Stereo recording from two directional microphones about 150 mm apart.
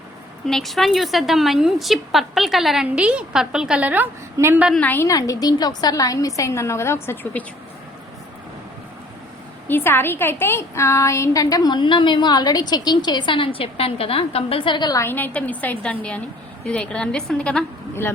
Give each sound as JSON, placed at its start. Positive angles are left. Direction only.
{"t": 0.4, "sound": "a woman's voice", "side_deg": 0}
{"t": 4.7, "sound": "a woman's voice", "side_deg": 10}
{"t": 9.6, "sound": "a woman's voice", "side_deg": 15}
{"t": 15.0, "sound": "a woman's voice", "side_deg": 15}